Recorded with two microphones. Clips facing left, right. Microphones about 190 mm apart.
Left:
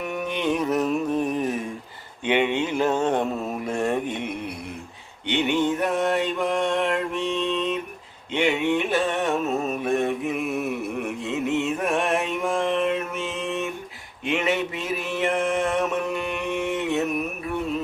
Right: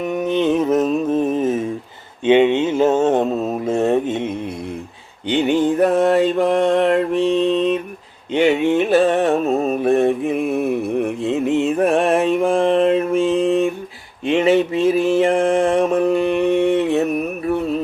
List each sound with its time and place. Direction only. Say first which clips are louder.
0.0 s mantra: right 8 dB; 20° right (ahead or behind)
5.3 s mantra: right 6 dB; 35° right (ahead or behind)